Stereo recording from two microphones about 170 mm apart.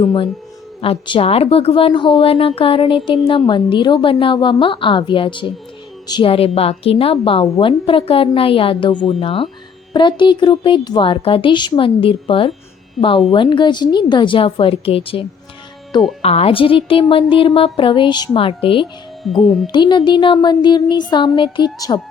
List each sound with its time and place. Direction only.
0.8 s a woman's voice: 30° left (ahead or behind)
16.2 s a woman's voice: 35° left (ahead or behind)
19.2 s speech: centre (ahead or behind)
19.6 s a woman's voice: 25° left (ahead or behind)